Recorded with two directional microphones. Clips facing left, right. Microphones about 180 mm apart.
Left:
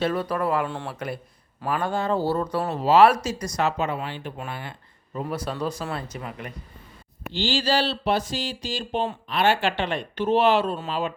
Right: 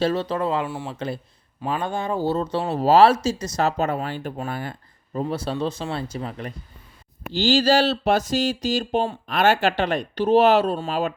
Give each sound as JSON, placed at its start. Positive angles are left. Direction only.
{"t": 0.0, "sound": "speech", "side_deg": -25}
{"t": 3.6, "sound": "speech", "side_deg": -40}
{"t": 5.2, "sound": "speech", "side_deg": -30}